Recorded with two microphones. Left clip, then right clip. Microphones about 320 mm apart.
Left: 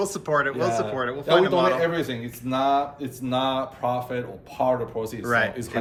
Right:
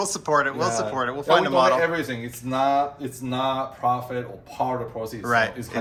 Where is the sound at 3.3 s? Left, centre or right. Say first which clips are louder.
Left 1 dB; centre.